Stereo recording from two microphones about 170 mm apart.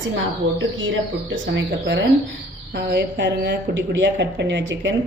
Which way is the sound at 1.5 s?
90° right.